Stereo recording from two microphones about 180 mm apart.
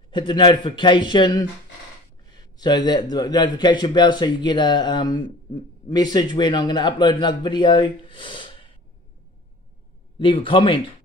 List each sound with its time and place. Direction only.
0.1 s speech: 25° left (ahead or behind)
2.5 s speech: 25° left (ahead or behind)
10.1 s speech: 30° left (ahead or behind)